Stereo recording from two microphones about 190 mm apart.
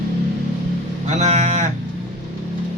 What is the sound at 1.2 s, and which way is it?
Cattle, 35° right (ahead or behind).